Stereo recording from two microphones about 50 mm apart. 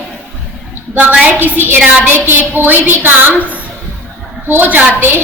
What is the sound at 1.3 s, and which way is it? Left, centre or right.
A woman's voice, right.